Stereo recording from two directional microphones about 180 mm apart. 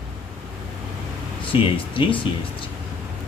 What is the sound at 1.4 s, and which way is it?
Speech, 30° left (ahead or behind).